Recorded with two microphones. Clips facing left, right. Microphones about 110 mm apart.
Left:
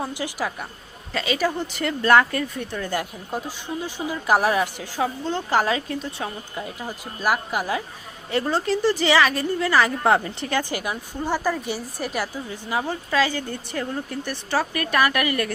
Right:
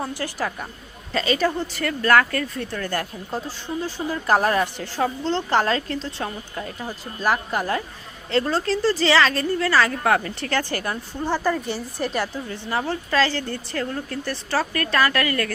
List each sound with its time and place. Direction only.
0.0 s speech: 10° left (ahead or behind)